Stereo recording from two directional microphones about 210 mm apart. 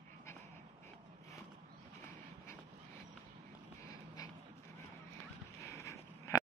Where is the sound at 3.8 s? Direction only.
15° left (ahead or behind).